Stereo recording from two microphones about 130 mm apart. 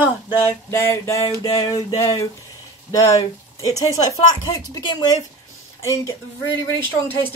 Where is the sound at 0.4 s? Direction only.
20° left (ahead or behind).